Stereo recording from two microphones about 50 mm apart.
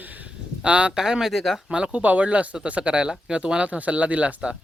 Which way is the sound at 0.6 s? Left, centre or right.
Right.